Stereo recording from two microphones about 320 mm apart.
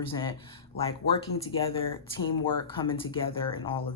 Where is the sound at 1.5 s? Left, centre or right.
Centre.